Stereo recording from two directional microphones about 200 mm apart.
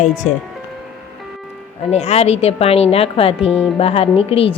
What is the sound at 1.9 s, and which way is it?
Speech, 30° left (ahead or behind).